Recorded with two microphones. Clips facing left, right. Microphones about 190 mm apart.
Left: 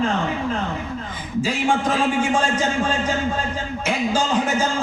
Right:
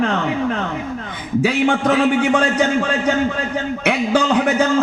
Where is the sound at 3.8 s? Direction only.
65° right (ahead or behind).